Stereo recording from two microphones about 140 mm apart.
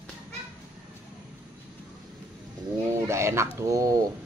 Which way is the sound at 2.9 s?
20° right (ahead or behind).